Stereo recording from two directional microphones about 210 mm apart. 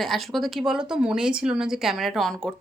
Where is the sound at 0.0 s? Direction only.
Centre (ahead or behind).